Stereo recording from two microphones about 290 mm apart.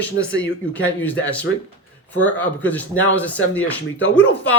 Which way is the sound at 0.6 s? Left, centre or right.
Centre.